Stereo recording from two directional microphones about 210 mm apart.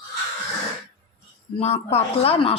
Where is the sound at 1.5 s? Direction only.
30° left (ahead or behind).